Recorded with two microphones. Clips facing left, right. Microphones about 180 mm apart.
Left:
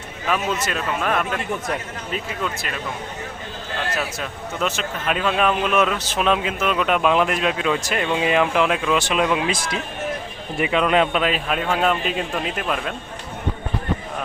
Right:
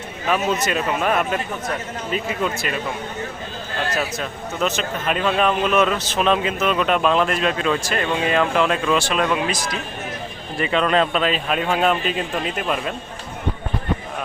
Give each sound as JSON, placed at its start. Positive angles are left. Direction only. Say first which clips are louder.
{"t": 0.3, "sound": "a man's voice", "louder": "right 2 dB", "side_deg": 0}
{"t": 3.9, "sound": "a man's voice", "louder": "right 2 dB", "side_deg": 0}
{"t": 10.6, "sound": "a man's voice", "louder": "even", "side_deg": 5}